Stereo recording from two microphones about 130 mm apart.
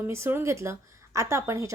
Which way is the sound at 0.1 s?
20° right (ahead or behind).